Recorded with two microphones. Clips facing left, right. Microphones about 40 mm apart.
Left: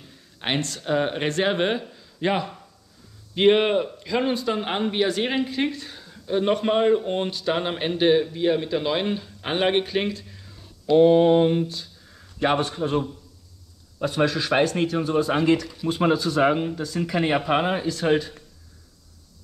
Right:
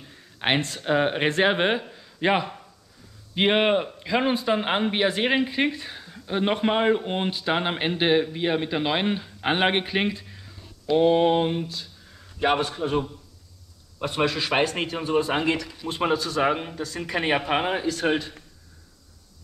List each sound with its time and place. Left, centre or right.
0.0 s speech: centre
11.1 s mantra: right
12.6 s speech: right
14.0 s a man's voice: right
16.8 s speech: right